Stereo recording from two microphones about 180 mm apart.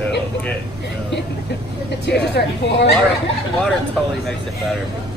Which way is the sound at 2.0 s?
70° left (ahead or behind).